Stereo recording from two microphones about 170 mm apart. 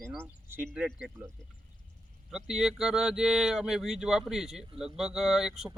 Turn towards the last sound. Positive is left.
turn(degrees=0)  # may be behind; listen again after turning